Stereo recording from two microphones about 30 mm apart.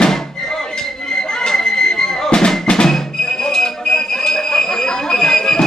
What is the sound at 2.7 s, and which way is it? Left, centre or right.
Music, left.